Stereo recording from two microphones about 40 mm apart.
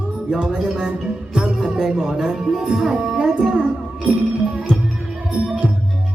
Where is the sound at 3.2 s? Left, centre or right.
Right.